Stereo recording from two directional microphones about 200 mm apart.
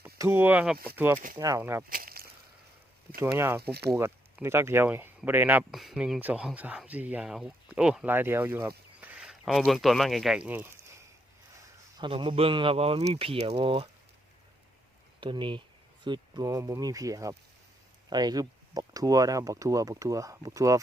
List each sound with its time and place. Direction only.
0.0 s speech: 10° right (ahead or behind)
1.9 s a sound: 45° right (ahead or behind)
3.3 s speech: 10° right (ahead or behind)
3.6 s speech: 55° right (ahead or behind)
3.9 s speech: 10° right (ahead or behind)
11.9 s speech: 25° right (ahead or behind)
15.2 s speech: 25° right (ahead or behind)